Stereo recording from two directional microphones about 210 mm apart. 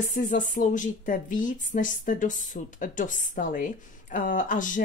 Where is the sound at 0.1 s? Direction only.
40° left (ahead or behind).